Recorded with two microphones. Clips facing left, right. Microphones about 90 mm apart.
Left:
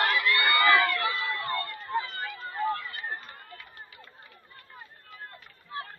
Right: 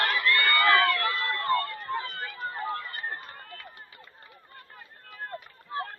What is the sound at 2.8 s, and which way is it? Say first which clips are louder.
Run: right 2 dB; 35° right (ahead or behind).